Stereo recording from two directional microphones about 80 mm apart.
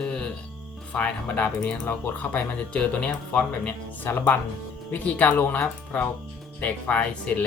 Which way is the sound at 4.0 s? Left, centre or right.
Left.